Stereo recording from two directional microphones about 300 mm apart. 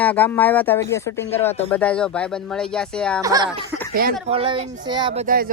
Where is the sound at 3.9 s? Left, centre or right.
Right.